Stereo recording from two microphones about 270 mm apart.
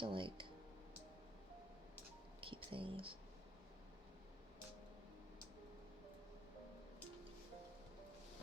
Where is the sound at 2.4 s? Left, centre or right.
Centre.